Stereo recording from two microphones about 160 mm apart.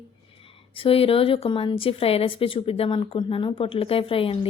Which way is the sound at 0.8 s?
35° left (ahead or behind).